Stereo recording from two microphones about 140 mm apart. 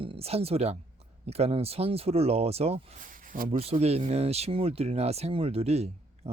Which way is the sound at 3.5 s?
45° right (ahead or behind).